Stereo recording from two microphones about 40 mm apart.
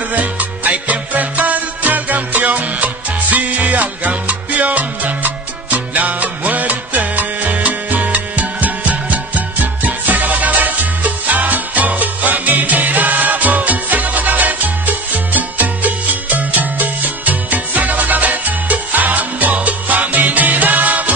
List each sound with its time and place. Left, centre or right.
0.1 s music: right